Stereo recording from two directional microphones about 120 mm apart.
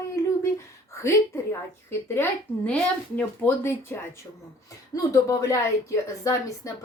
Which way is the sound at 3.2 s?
20° left (ahead or behind).